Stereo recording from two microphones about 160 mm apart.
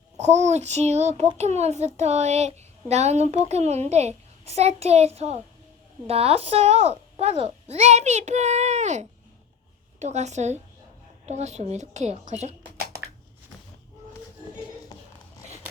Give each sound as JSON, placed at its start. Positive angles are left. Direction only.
{"t": 0.2, "sound": "a child's voice", "side_deg": -45}